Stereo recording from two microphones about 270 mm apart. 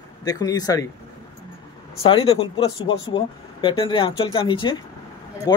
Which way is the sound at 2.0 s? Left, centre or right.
Centre.